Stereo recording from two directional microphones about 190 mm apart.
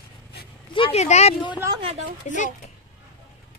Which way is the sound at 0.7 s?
30° left (ahead or behind).